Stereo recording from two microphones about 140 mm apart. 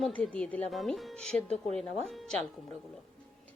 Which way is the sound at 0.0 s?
5° left (ahead or behind).